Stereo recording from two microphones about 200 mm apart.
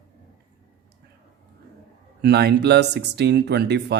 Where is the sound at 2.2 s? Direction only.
55° right (ahead or behind).